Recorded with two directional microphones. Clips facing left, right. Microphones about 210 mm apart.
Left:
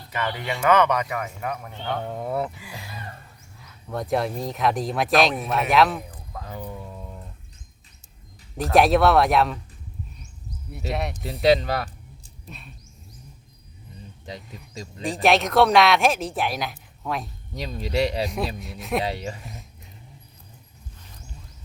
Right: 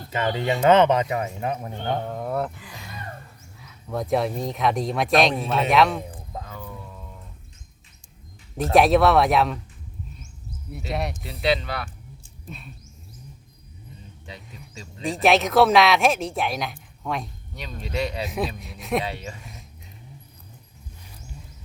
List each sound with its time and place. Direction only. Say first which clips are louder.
0.1 s speech: right 5 dB; 25° right (ahead or behind)
2.0 s speech: even; 5° left (ahead or behind)
6.0 s a sound: right 3 dB; 25° right (ahead or behind)
6.5 s music: left 3 dB; 30° left (ahead or behind)
8.7 s speech: even; centre (ahead or behind)
10.7 s speech: even; centre (ahead or behind)
11.1 s speech: left 7 dB; 45° left (ahead or behind)
12.5 s speech: right 3 dB; centre (ahead or behind)
15.0 s speech: right 1 dB; centre (ahead or behind)
17.5 s speech: left 5 dB; 40° left (ahead or behind)
18.3 s speech: right 1 dB; centre (ahead or behind)
19.0 s speech: left 4 dB; 35° left (ahead or behind)